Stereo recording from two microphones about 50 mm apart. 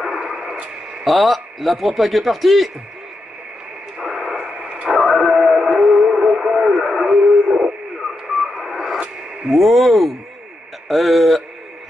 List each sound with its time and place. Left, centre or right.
0.1 s radio: centre
1.0 s a man's voice: centre
4.0 s radio: centre
4.8 s radio: centre
5.3 s music: centre
5.7 s radio: centre
6.8 s music: centre
7.2 s dog: centre
8.5 s radio: centre
9.5 s a man's voice: centre